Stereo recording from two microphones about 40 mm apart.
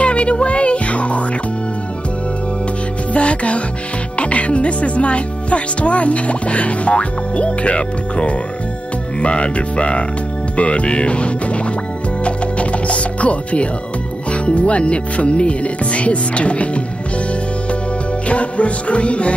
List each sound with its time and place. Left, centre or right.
0.0 s music: left
3.1 s music: left
4.2 s speech: left
12.3 s music: left
14.3 s speech: left
18.3 s music: left